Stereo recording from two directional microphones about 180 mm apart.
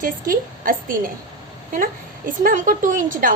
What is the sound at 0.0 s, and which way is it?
A woman's voice, 50° right (ahead or behind).